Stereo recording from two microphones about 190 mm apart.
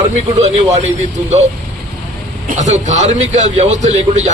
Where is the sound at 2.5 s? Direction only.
40° right (ahead or behind).